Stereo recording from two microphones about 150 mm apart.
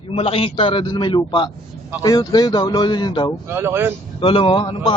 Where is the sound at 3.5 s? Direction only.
15° right (ahead or behind).